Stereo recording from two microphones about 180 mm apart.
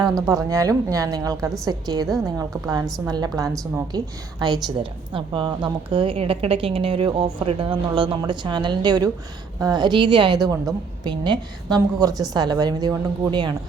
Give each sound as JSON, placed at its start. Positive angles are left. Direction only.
{"t": 0.0, "sound": "a woman's voice", "side_deg": -20}